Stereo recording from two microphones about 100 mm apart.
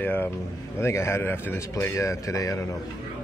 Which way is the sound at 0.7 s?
25° left (ahead or behind).